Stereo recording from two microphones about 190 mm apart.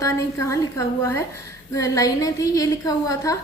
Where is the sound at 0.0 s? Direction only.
15° left (ahead or behind).